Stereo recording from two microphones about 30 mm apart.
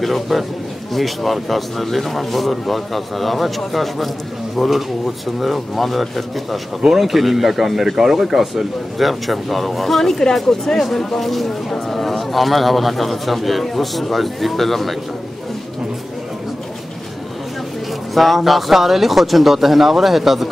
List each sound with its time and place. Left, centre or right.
0.0 s speech: centre
18.1 s speech: centre